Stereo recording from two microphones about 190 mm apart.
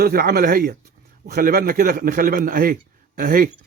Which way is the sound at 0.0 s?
50° right (ahead or behind).